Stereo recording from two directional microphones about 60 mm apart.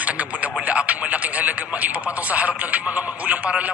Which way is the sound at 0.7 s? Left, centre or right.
Right.